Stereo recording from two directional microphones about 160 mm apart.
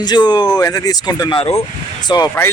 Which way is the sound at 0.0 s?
25° left (ahead or behind).